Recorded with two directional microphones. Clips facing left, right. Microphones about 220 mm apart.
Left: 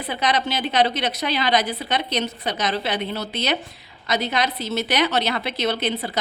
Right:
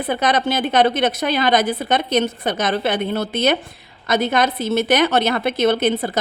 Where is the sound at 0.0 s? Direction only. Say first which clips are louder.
Right 5 dB; 50° right (ahead or behind).